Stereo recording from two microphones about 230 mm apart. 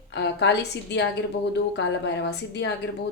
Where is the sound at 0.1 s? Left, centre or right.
Left.